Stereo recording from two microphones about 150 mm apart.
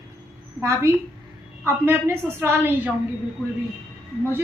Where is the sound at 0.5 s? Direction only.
20° right (ahead or behind).